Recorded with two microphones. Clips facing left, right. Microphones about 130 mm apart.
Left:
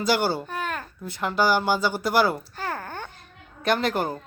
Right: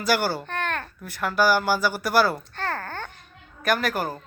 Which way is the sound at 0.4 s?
5° left (ahead or behind).